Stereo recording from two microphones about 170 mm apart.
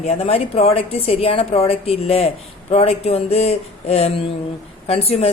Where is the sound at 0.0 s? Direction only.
35° left (ahead or behind).